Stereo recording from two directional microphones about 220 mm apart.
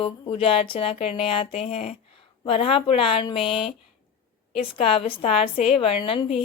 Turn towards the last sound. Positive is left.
turn(degrees=25)  # may be behind; listen again after turning